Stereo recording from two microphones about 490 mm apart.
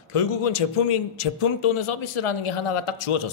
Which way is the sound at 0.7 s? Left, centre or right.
Left.